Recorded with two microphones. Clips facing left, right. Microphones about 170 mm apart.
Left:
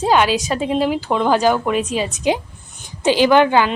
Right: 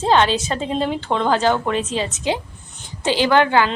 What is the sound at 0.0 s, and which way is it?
A woman's voice, 10° left (ahead or behind).